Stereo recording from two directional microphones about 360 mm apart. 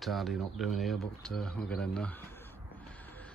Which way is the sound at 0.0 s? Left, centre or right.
Centre.